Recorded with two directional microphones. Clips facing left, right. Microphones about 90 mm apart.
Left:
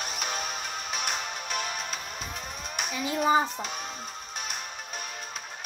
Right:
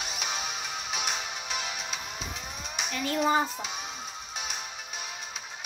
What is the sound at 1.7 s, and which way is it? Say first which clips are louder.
Music: left 2 dB; 45° left (ahead or behind).